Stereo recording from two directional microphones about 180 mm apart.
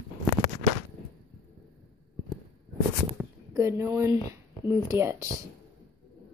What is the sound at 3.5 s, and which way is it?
Speech, 15° right (ahead or behind).